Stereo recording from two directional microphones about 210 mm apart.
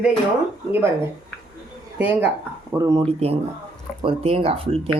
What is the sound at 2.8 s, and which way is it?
Speech, 20° right (ahead or behind).